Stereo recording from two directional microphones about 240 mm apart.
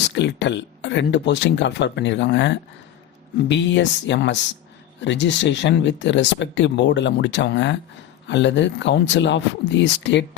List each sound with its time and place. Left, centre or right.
0.1 s speech: left